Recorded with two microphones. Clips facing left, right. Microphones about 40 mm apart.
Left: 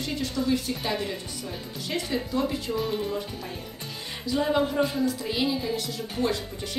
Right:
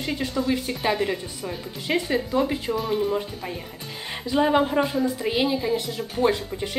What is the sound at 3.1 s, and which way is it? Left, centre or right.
Speech, right.